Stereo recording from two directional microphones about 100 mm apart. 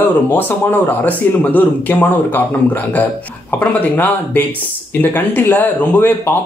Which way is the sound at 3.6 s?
15° left (ahead or behind).